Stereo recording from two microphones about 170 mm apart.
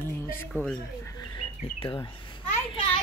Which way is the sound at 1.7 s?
30° left (ahead or behind).